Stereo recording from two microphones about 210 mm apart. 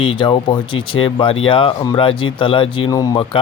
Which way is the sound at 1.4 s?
25° left (ahead or behind).